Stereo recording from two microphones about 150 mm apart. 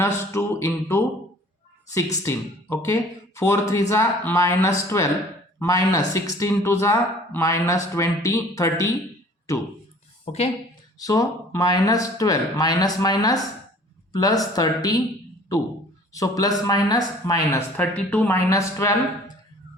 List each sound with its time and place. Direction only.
0.0 s speech: 20° left (ahead or behind)
2.2 s speech: 20° left (ahead or behind)
11.0 s speech: 25° left (ahead or behind)
17.7 s speech: 10° left (ahead or behind)
18.3 s speech: 20° left (ahead or behind)